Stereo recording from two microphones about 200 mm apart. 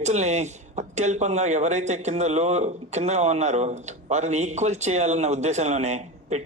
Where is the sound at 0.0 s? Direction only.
35° right (ahead or behind).